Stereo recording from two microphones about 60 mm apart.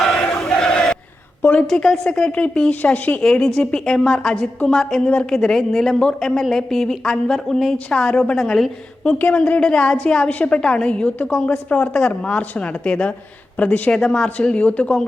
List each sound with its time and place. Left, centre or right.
0.0 s crowd: centre
1.4 s a woman's voice: left
1.6 s a woman's voice: centre; by 3.2 s left
3.2 s a woman's voice: centre
5.0 s a woman's voice: centre
8.4 s a woman's voice: centre
9.1 s a woman's voice: left
9.5 s a woman's voice: centre